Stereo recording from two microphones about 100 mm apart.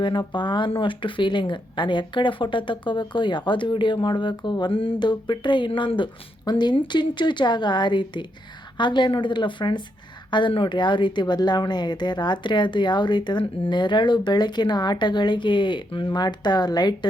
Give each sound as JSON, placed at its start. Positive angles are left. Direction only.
{"t": 0.0, "sound": "speech", "side_deg": 50}